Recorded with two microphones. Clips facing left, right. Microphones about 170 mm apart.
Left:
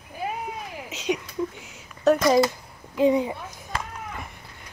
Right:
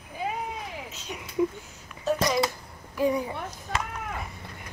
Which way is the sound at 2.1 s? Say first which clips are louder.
Left 8 dB; 75° left (ahead or behind).